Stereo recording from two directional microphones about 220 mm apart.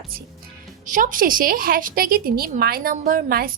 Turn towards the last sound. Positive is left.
turn(degrees=-40)  # may be behind; listen again after turning